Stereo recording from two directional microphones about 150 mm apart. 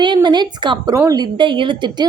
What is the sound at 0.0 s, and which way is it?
A woman's voice, 30° right (ahead or behind).